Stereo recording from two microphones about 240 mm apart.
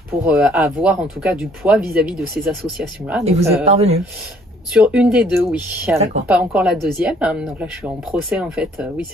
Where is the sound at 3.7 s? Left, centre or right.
Right.